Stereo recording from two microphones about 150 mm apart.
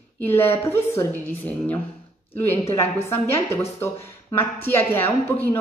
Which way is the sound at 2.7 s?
20° left (ahead or behind).